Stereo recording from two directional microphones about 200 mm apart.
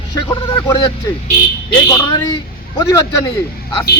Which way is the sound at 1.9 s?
15° left (ahead or behind).